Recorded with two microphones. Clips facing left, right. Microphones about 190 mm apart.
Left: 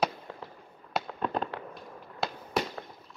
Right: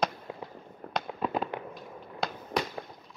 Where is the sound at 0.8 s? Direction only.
55° right (ahead or behind).